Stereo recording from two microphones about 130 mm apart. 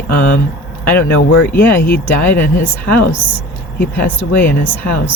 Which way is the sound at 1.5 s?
15° left (ahead or behind).